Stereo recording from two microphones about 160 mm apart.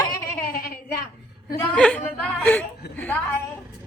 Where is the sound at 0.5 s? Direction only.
60° left (ahead or behind).